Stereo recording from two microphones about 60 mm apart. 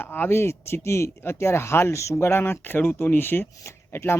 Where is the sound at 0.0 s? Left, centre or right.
Left.